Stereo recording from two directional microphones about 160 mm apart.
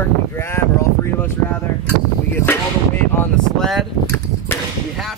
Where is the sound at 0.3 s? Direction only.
15° left (ahead or behind).